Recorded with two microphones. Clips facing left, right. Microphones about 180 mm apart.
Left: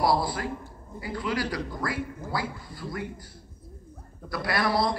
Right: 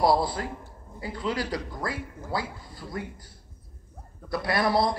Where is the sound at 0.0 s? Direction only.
20° right (ahead or behind).